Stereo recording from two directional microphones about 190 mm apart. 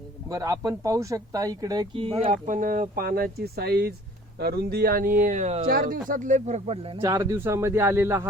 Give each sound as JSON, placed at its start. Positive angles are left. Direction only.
{"t": 0.3, "sound": "speech", "side_deg": -15}
{"t": 2.3, "sound": "speech", "side_deg": -45}
{"t": 5.6, "sound": "speech", "side_deg": -50}
{"t": 7.0, "sound": "speech", "side_deg": -15}